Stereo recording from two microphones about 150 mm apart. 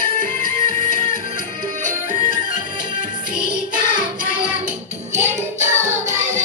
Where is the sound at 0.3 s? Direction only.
60° right (ahead or behind).